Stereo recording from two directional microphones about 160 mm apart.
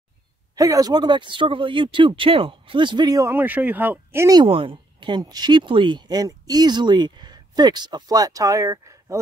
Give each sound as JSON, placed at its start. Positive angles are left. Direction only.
{"t": 0.6, "sound": "speech", "side_deg": -20}
{"t": 4.4, "sound": "speech", "side_deg": -35}